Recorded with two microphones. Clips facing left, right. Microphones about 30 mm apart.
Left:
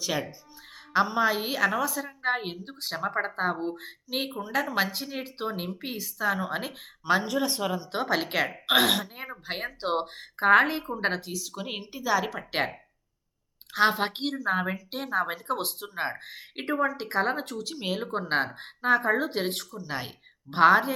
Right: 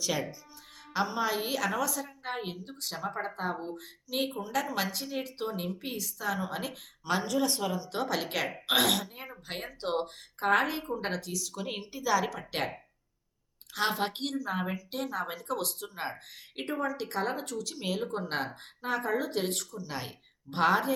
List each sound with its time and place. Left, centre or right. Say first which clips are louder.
0.0 s a woman's voice: left 2 dB; centre
13.7 s a woman's voice: left 6 dB; left